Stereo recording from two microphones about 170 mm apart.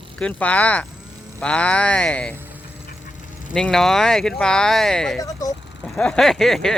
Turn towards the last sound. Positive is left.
turn(degrees=0)  # may be behind; listen again after turning